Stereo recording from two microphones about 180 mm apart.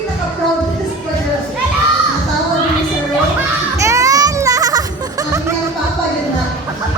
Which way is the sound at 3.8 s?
15° right (ahead or behind).